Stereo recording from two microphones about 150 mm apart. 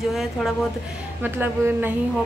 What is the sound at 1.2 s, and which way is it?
Speech, 15° right (ahead or behind).